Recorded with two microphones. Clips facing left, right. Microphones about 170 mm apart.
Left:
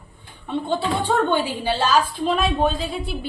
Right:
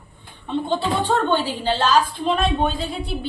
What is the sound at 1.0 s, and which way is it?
A woman's voice, 10° left (ahead or behind).